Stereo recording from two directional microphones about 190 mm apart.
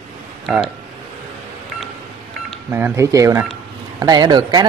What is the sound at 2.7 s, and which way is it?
Speech, 10° right (ahead or behind).